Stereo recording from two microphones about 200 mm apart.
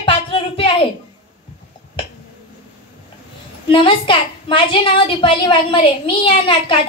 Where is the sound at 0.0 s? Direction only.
25° left (ahead or behind).